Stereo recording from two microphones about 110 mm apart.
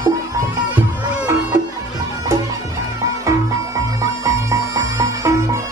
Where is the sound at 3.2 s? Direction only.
30° right (ahead or behind).